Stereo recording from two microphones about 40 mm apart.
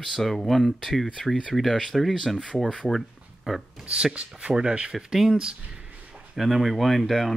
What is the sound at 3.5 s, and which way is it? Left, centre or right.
Speech, centre.